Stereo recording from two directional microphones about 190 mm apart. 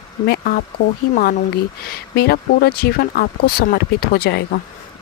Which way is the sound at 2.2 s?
55° left (ahead or behind).